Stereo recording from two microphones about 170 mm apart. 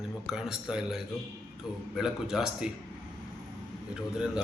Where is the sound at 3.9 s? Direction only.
5° right (ahead or behind).